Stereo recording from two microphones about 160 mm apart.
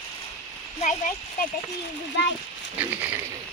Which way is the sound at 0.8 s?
55° left (ahead or behind).